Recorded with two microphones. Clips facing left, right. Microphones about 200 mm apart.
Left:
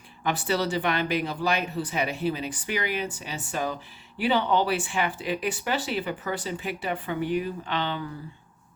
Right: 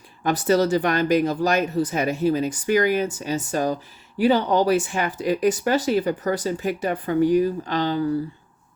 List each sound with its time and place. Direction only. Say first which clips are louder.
0.2 s speech: right 7 dB; 40° right (ahead or behind)